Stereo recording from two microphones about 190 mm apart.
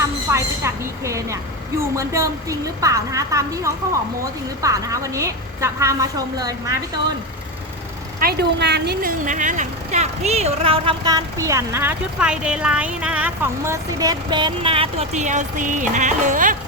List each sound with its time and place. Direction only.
0.0 s a woman's voice: 15° right (ahead or behind)
8.2 s a woman's voice: 55° right (ahead or behind)